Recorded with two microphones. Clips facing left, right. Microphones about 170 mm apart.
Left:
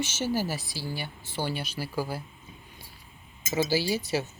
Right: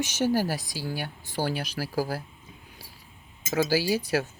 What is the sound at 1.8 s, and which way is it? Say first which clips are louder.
Speech: right 2 dB; 70° right (ahead or behind).